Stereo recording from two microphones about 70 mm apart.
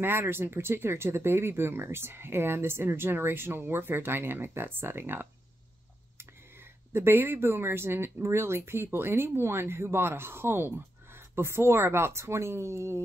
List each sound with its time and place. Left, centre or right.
0.0 s speech: right
6.9 s speech: right